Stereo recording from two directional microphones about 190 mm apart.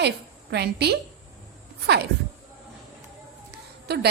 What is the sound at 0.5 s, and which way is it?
Speech, 60° right (ahead or behind).